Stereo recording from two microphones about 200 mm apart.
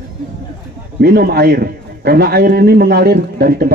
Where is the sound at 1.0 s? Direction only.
50° right (ahead or behind).